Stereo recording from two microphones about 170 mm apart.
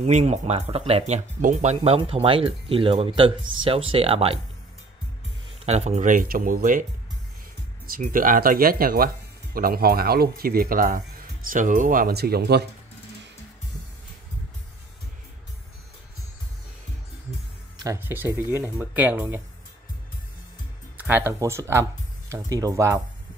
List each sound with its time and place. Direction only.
0.0 s speech: 40° right (ahead or behind)
5.7 s speech: 40° right (ahead or behind); by 12.6 s 70° right (ahead or behind)
17.8 s speech: 15° right (ahead or behind)
21.0 s speech: 10° right (ahead or behind)